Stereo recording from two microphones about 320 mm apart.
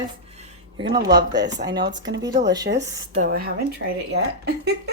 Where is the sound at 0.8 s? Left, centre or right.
Centre.